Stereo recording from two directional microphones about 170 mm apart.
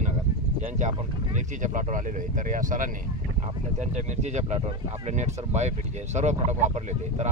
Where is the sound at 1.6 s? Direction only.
45° right (ahead or behind).